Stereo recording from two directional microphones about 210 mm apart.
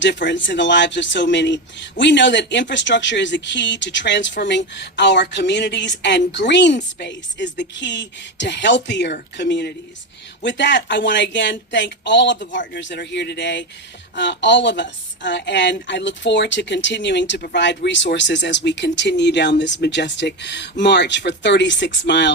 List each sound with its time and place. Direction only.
0.0 s a woman's voice: 60° left (ahead or behind)